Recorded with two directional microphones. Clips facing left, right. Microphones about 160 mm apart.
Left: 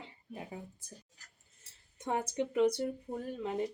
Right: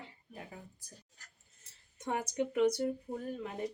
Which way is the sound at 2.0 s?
30° left (ahead or behind).